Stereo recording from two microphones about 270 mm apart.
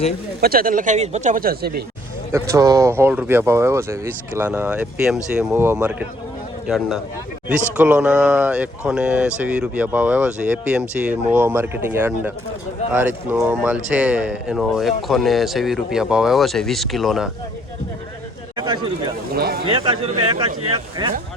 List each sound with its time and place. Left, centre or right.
0.4 s speech: right
2.3 s speech: centre
18.5 s speech: centre
19.3 s speech: right
19.6 s speech: centre